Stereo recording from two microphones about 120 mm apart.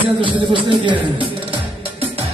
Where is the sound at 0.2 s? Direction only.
45° right (ahead or behind).